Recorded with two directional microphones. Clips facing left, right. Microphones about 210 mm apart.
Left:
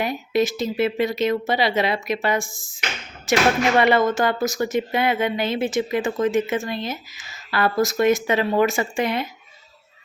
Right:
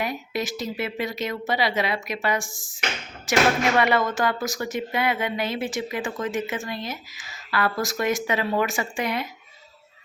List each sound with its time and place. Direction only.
0.0 s speech: 25° left (ahead or behind)
3.8 s speech: 25° left (ahead or behind)